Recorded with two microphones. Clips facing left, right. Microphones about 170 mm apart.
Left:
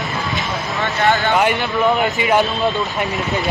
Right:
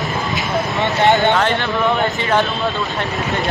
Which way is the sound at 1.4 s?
10° left (ahead or behind).